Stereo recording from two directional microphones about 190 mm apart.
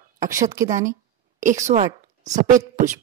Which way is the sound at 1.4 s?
40° right (ahead or behind).